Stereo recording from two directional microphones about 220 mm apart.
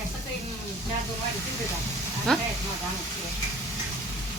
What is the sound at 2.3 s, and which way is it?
Speech, centre (ahead or behind).